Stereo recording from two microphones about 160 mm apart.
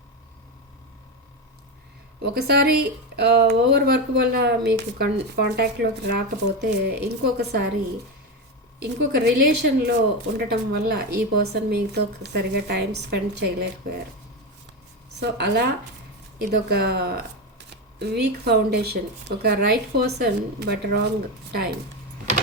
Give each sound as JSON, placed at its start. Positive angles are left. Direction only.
{"t": 2.3, "sound": "speech", "side_deg": -80}
{"t": 8.8, "sound": "speech", "side_deg": -90}
{"t": 15.2, "sound": "speech", "side_deg": -90}